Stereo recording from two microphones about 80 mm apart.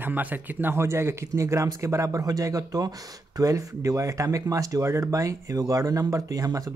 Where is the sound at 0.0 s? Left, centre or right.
Right.